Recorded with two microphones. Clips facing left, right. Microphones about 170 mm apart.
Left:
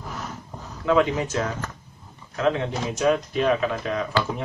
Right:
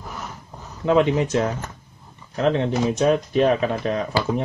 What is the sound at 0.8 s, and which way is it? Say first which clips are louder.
Speech: right 3 dB; 30° right (ahead or behind).